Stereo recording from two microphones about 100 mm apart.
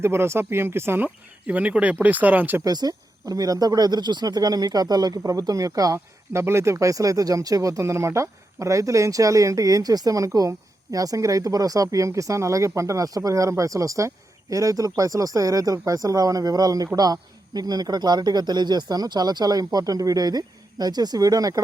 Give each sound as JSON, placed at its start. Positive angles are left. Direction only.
{"t": 0.0, "sound": "speech", "side_deg": -25}
{"t": 2.6, "sound": "speech", "side_deg": -40}